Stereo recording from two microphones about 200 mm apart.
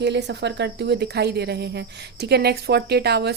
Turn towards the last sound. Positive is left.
turn(degrees=-55)  # may be behind; listen again after turning